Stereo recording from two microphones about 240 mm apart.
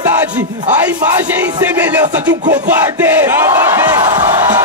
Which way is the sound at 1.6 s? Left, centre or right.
Centre.